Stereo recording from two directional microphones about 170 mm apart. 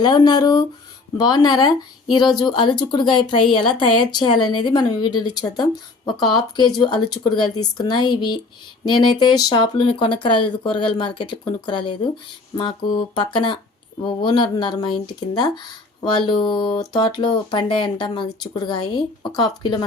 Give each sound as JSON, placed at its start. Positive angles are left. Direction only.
{"t": 0.0, "sound": "speech", "side_deg": 25}